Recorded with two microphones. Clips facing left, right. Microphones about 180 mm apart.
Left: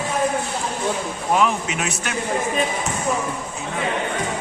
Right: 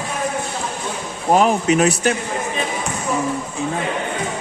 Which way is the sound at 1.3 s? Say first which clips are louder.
Right 6 dB; 40° right (ahead or behind).